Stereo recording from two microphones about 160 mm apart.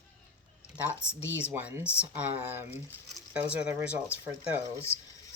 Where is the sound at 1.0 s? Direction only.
15° left (ahead or behind).